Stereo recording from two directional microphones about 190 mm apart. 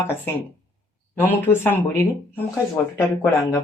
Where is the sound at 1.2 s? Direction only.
10° left (ahead or behind).